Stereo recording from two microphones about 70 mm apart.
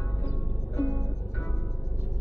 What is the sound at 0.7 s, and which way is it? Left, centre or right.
Music, left.